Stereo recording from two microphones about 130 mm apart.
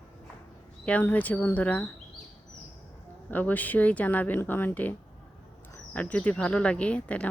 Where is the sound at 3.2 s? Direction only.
15° left (ahead or behind).